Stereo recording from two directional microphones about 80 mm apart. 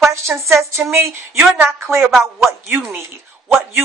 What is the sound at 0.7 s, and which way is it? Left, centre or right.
Speech, right.